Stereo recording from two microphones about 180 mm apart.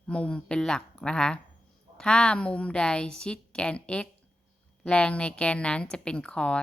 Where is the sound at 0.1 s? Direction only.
5° left (ahead or behind).